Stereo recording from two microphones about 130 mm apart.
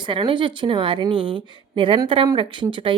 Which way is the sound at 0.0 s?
40° right (ahead or behind).